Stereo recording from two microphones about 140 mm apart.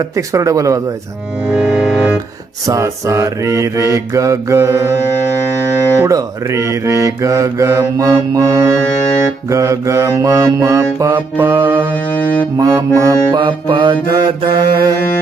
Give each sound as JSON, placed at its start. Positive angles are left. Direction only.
{"t": 0.2, "sound": "mantra", "side_deg": -25}
{"t": 1.5, "sound": "music", "side_deg": -5}
{"t": 2.6, "sound": "mantra", "side_deg": -20}
{"t": 6.0, "sound": "mantra", "side_deg": -20}
{"t": 12.1, "sound": "music", "side_deg": 10}
{"t": 12.5, "sound": "mantra", "side_deg": -25}
{"t": 13.3, "sound": "music", "side_deg": -35}